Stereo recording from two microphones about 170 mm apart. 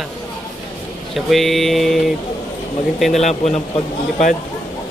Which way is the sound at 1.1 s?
Centre (ahead or behind).